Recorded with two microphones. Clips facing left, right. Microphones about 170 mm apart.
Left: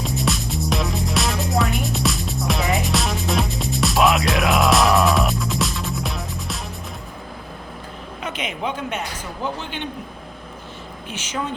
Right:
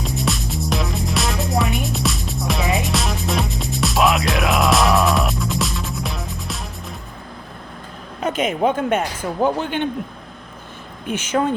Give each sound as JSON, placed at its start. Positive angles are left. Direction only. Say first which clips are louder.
{"t": 0.0, "sound": "music", "louder": "even", "side_deg": 0}
{"t": 8.2, "sound": "speech", "louder": "right 9 dB", "side_deg": -45}
{"t": 11.1, "sound": "speech", "louder": "right 8 dB", "side_deg": -55}